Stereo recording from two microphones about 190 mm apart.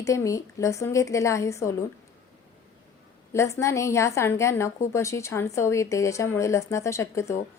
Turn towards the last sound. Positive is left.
turn(degrees=15)  # may be behind; listen again after turning